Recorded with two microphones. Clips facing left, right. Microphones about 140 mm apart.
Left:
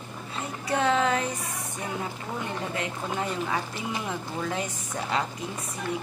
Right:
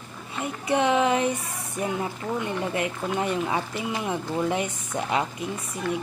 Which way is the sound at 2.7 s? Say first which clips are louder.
Right 4 dB; 25° right (ahead or behind).